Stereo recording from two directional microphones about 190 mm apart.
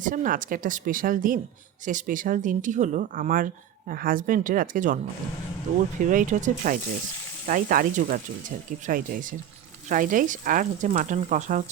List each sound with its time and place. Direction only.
0.0 s speech: 45° right (ahead or behind)
6.0 s speech: 45° right (ahead or behind)